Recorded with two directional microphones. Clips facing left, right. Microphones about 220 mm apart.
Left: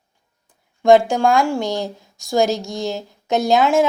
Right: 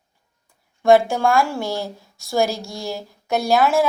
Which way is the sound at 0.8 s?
15° left (ahead or behind).